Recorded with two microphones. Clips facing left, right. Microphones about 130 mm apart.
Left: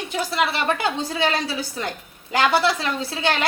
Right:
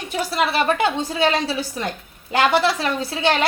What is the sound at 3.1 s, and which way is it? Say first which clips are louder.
Speech: right 4 dB; 25° right (ahead or behind).